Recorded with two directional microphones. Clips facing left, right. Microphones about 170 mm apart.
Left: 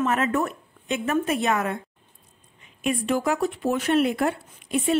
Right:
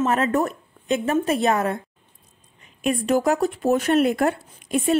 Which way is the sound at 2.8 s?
40° right (ahead or behind).